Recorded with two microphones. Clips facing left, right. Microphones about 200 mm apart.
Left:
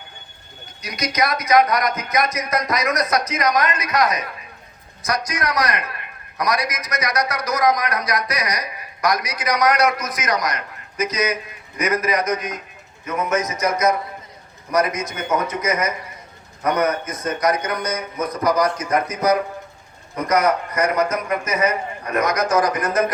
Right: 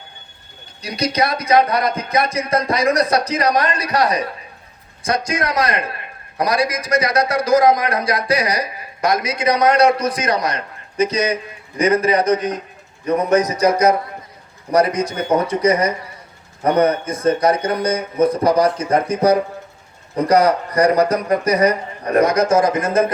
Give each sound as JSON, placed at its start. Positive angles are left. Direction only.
{"t": 0.8, "sound": "a man's voice", "side_deg": -30}